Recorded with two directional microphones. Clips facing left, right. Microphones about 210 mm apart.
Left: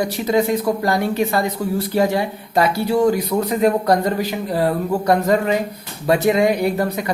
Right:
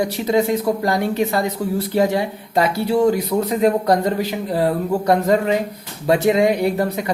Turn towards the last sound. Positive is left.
turn(degrees=-25)  # may be behind; listen again after turning